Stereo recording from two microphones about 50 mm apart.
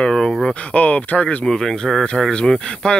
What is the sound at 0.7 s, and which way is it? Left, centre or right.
Speech, left.